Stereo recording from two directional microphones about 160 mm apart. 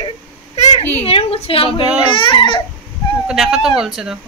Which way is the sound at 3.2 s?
Centre (ahead or behind).